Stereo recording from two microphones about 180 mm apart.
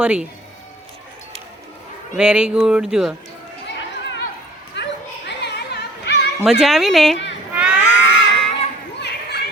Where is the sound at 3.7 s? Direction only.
85° left.